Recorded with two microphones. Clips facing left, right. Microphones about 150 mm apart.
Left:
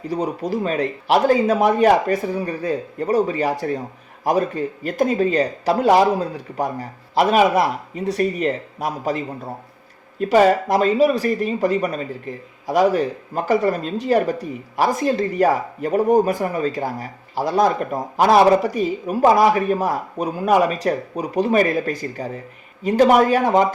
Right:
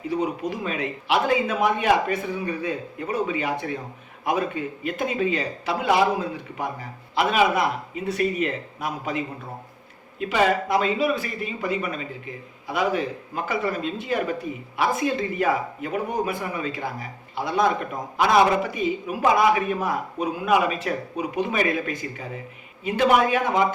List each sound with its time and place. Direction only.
0.1 s speech: 35° left (ahead or behind)